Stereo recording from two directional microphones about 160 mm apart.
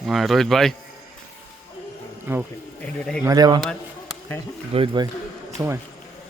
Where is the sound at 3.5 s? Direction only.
Centre (ahead or behind).